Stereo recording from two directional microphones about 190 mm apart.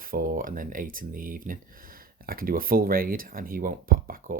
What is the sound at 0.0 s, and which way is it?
Speech, 50° right (ahead or behind).